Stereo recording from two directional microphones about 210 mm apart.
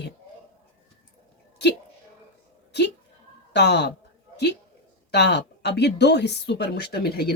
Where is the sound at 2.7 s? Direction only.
55° left (ahead or behind).